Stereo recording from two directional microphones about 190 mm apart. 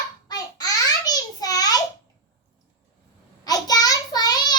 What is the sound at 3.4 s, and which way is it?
Child singing, 20° left (ahead or behind).